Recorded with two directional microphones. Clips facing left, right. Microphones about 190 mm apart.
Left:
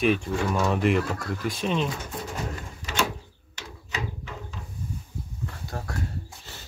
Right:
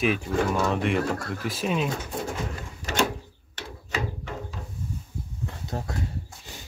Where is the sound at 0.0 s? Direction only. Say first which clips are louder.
Even; centre (ahead or behind).